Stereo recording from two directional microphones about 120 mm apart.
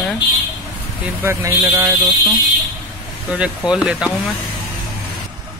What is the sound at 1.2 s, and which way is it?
Speech, 20° right (ahead or behind).